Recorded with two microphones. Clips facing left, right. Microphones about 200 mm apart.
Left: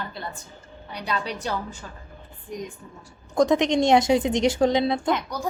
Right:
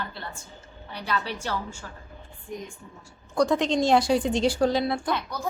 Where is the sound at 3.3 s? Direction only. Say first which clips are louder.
Left 3 dB; 20° left (ahead or behind).